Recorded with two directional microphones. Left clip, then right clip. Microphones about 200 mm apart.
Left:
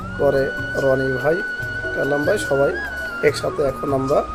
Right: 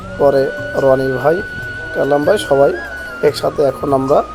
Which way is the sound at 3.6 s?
25° right (ahead or behind).